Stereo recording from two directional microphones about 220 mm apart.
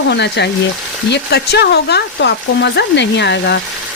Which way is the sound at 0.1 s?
50° left (ahead or behind).